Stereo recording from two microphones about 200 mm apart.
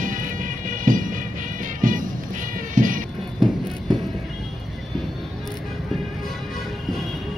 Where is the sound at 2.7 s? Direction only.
40° right (ahead or behind).